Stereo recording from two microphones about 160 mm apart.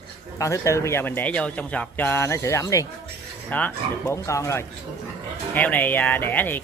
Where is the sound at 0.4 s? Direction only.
20° left (ahead or behind).